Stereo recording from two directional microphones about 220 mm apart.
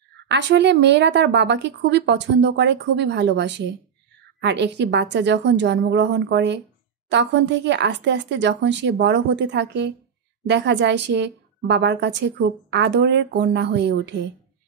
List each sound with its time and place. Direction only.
0.3 s a woman's voice: 50° right (ahead or behind)